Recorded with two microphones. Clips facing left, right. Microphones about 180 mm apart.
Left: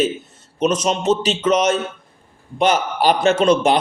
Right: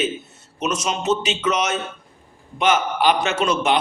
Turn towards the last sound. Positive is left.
turn(degrees=35)  # may be behind; listen again after turning